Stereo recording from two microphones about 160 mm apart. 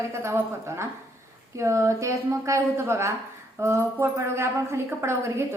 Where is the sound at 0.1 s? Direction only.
15° right (ahead or behind).